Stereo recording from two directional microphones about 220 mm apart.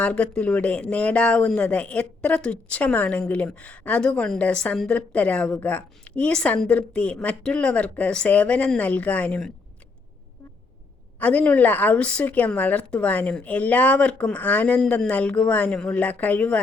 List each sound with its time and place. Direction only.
0.0 s speech: 5° left (ahead or behind)
11.2 s a woman's voice: 5° left (ahead or behind)